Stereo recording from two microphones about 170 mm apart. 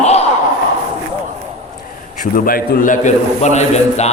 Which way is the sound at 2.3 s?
55° left (ahead or behind).